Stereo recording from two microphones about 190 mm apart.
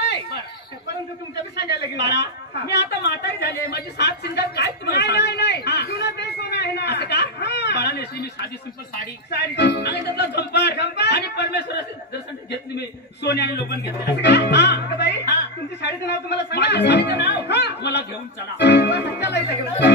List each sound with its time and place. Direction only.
1.6 s a woman's voice: 65° left (ahead or behind)